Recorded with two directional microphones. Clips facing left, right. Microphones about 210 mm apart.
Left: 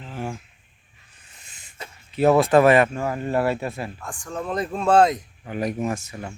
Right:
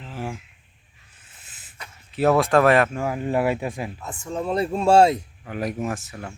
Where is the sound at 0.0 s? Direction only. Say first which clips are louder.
Left 1 dB; 5° right (ahead or behind).